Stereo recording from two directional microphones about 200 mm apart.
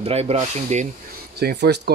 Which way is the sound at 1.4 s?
55° right (ahead or behind).